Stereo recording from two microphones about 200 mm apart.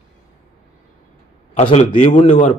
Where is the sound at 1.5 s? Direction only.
30° left (ahead or behind).